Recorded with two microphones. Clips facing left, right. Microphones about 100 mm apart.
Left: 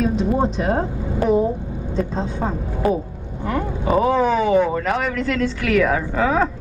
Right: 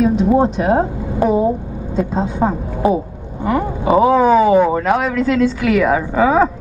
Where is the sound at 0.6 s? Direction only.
10° right (ahead or behind).